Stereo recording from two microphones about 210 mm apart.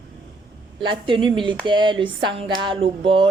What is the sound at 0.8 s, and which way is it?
Speech, 20° right (ahead or behind).